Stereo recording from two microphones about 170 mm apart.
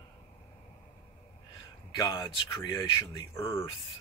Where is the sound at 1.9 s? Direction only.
25° left (ahead or behind).